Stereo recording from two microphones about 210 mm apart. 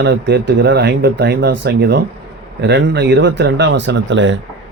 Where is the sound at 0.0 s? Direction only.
60° right (ahead or behind).